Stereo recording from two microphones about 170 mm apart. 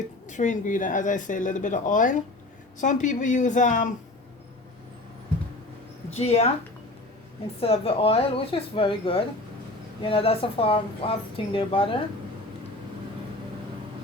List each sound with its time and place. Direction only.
0.3 s speech: 45° left (ahead or behind)
6.1 s speech: 35° left (ahead or behind)
7.6 s speech: 35° left (ahead or behind)